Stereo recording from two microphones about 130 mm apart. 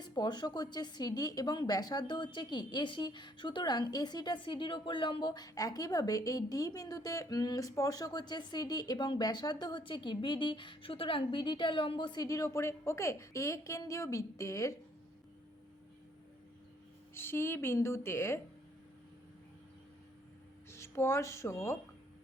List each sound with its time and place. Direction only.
0.0 s a woman's voice: 30° left (ahead or behind)
17.2 s a woman's voice: 20° left (ahead or behind)
20.7 s speech: 20° left (ahead or behind)